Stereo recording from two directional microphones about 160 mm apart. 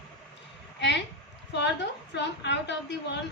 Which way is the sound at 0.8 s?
90° left.